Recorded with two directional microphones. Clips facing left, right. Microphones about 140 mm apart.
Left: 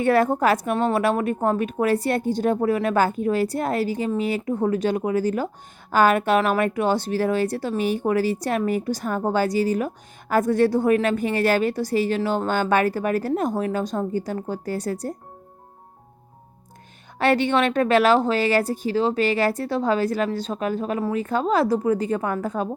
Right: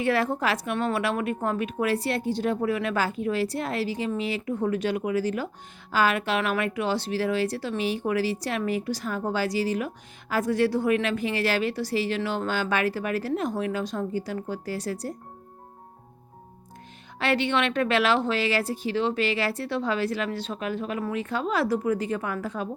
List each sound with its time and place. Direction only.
0.0 s speech: 50° left (ahead or behind)
17.2 s speech: 45° left (ahead or behind)